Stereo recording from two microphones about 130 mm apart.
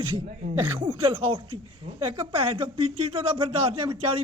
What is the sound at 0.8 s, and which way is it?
Speech, 45° right (ahead or behind).